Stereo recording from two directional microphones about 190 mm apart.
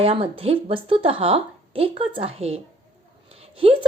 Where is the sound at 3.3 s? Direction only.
30° right (ahead or behind).